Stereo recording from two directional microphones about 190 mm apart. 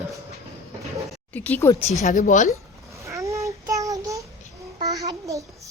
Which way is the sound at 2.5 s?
15° right (ahead or behind).